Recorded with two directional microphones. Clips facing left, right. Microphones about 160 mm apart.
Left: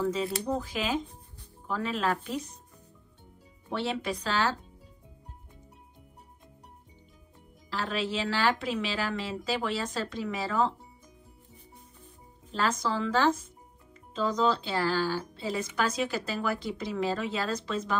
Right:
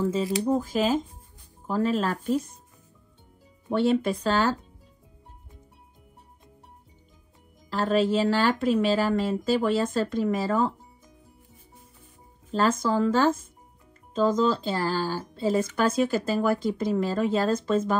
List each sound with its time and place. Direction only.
0.1 s speech: 45° right (ahead or behind)
3.7 s speech: 50° right (ahead or behind)
7.7 s speech: 45° right (ahead or behind)
12.4 s speech: 45° right (ahead or behind)